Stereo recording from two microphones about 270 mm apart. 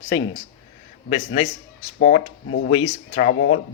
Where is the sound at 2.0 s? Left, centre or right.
Left.